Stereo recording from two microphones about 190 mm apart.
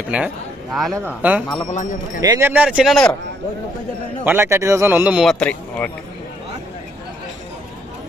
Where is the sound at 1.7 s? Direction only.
40° left (ahead or behind).